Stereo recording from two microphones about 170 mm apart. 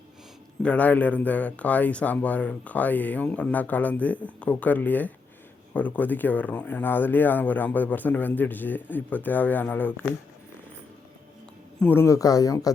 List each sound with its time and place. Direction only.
0.6 s speech: 10° left (ahead or behind)
11.8 s speech: 10° left (ahead or behind)